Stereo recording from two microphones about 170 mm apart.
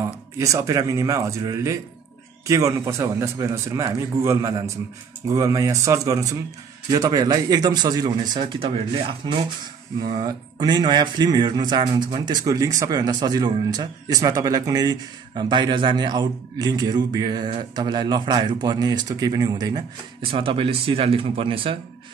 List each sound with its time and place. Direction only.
0.4 s a man's voice: 15° right (ahead or behind)